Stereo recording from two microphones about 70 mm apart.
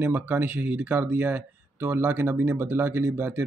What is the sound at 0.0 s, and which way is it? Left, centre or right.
Speech, right.